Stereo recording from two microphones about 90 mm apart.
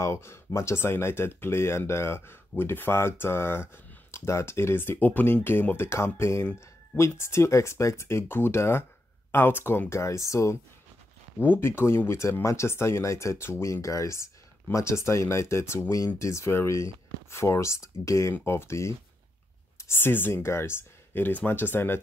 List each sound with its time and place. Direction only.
0.0 s speech: 30° left (ahead or behind)
11.4 s speech: 25° left (ahead or behind)